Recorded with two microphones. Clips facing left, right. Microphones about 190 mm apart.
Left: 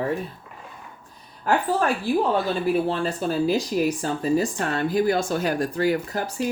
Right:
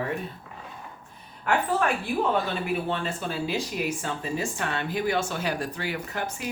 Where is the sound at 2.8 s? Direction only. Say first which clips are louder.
Left 5 dB; 35° left (ahead or behind).